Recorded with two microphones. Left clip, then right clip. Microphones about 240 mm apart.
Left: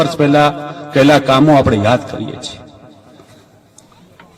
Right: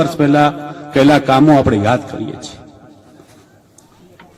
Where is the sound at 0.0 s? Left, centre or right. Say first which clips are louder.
Left 1 dB; left.